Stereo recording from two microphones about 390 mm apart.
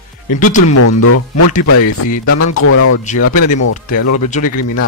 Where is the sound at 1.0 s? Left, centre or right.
Left.